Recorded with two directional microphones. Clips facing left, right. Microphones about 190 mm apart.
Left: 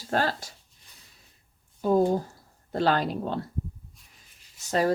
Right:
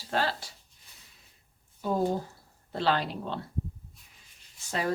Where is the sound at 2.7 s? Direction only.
45° left (ahead or behind).